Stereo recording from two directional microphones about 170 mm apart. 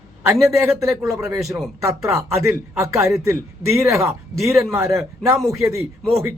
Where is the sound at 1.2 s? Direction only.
Centre (ahead or behind).